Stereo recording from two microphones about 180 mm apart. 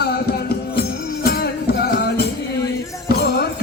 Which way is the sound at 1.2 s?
60° left (ahead or behind).